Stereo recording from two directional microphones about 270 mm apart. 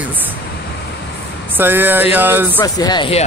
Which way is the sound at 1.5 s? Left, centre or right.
Centre.